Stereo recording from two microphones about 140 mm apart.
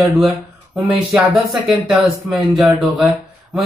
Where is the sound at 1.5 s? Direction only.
Centre (ahead or behind).